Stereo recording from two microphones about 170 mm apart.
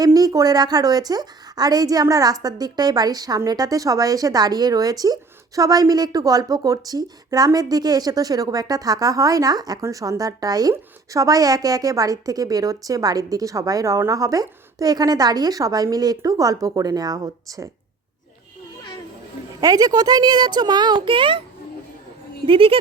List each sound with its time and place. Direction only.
0.0 s a woman's voice: 20° right (ahead or behind)
19.6 s a woman's voice: 20° right (ahead or behind)
22.4 s speech: 30° right (ahead or behind)